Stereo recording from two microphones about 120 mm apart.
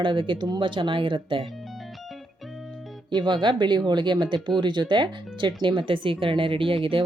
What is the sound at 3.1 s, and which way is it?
Speech, 40° right (ahead or behind).